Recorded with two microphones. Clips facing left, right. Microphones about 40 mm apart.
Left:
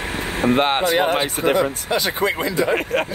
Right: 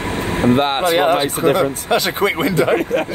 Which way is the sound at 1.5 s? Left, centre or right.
Right.